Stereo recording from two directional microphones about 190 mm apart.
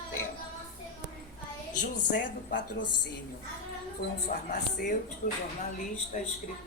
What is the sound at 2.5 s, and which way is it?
Speech, 70° left (ahead or behind).